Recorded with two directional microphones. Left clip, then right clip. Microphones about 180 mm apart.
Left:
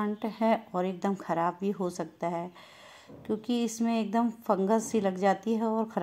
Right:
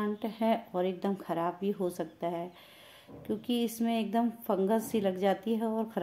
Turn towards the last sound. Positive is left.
turn(degrees=20)  # may be behind; listen again after turning